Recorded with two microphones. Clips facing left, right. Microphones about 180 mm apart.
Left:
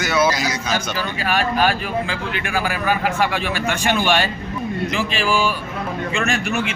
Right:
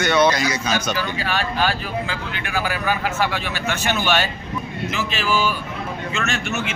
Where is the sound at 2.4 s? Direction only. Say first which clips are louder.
Even; 45° left (ahead or behind).